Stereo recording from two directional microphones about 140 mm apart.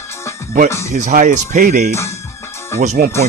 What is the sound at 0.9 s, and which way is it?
Speech, 65° right (ahead or behind).